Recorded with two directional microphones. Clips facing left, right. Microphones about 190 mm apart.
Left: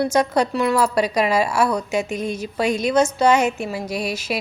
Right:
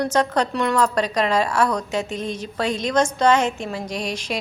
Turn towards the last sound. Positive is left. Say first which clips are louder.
# left 2 dB
turn(degrees=5)  # may be behind; listen again after turning